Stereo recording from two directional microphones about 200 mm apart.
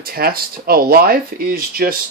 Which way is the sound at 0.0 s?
50° right (ahead or behind).